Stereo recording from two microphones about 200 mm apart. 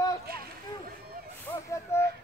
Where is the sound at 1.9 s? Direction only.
15° left (ahead or behind).